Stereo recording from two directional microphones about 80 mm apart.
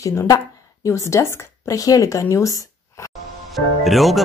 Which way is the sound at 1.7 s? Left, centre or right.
Left.